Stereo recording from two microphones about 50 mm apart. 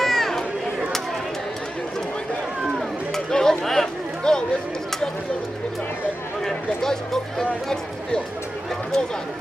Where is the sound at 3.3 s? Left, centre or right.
Centre.